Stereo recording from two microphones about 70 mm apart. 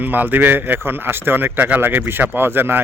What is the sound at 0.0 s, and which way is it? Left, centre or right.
A man's voice, right.